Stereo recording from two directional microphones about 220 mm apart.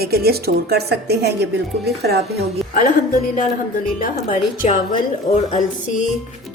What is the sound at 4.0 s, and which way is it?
Speech, 35° left (ahead or behind).